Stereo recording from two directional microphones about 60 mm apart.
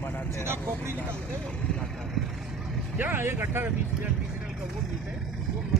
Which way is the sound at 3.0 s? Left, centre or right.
Right.